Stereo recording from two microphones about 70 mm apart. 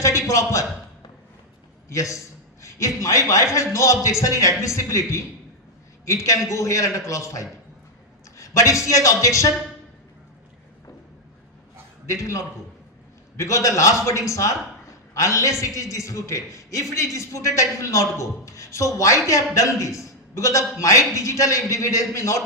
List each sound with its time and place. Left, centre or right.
0.0 s speech: left
1.9 s a man's voice: left
12.0 s a man's voice: left